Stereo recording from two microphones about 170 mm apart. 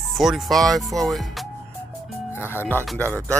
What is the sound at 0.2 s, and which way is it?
Speech, centre (ahead or behind).